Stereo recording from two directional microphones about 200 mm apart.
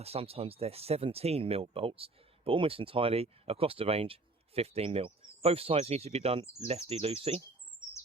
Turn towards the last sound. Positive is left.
turn(degrees=-25)  # may be behind; listen again after turning